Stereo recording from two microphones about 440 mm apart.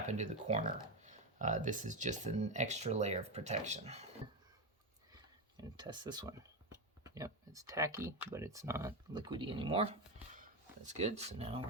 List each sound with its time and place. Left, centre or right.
0.0 s speech: centre
5.5 s speech: centre